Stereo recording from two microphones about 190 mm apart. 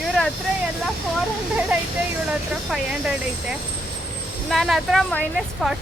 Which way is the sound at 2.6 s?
5° right (ahead or behind).